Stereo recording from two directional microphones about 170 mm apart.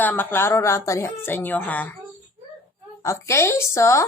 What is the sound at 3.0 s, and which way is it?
Speech, 15° left (ahead or behind).